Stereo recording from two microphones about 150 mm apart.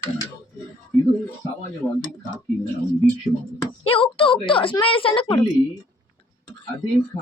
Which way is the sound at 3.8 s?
35° left (ahead or behind).